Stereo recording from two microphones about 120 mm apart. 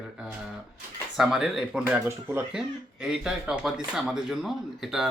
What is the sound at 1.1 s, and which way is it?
Speech, 5° right (ahead or behind).